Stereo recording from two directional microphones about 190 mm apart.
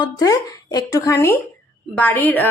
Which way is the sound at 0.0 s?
20° left (ahead or behind).